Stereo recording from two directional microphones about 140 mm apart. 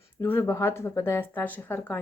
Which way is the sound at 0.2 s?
15° left (ahead or behind).